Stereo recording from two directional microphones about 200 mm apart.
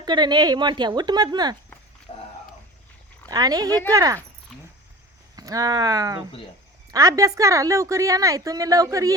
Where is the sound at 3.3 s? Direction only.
20° right (ahead or behind).